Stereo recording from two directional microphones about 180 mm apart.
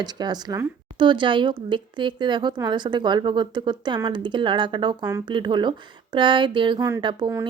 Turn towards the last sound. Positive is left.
turn(degrees=-20)  # may be behind; listen again after turning